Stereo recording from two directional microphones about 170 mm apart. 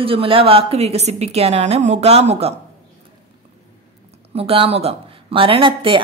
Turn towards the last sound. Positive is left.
turn(degrees=-30)  # may be behind; listen again after turning